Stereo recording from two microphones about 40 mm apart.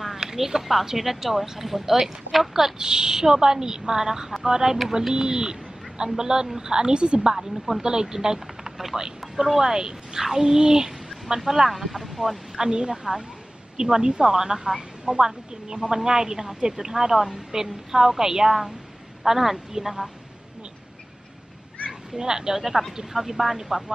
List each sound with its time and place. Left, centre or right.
0.0 s a woman's voice: centre
2.8 s a woman's voice: centre
7.3 s speech: centre
7.8 s a woman's voice: centre
12.5 s a woman's voice: centre
22.1 s a woman's voice: centre